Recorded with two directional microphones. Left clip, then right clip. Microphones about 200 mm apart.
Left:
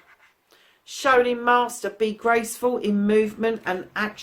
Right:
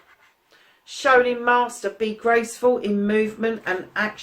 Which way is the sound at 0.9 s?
45° left (ahead or behind).